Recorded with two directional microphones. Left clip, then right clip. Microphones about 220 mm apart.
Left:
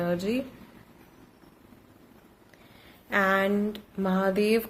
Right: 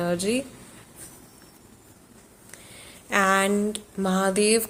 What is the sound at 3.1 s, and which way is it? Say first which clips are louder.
Speech: right 3 dB; 20° right (ahead or behind).